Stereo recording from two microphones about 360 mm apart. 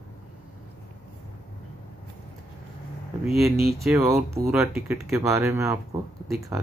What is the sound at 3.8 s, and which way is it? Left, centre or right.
Speech, centre.